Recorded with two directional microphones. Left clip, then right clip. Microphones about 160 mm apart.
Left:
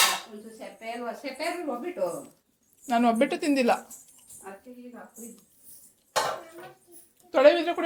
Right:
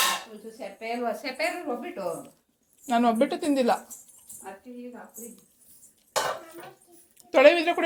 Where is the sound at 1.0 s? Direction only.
60° right (ahead or behind).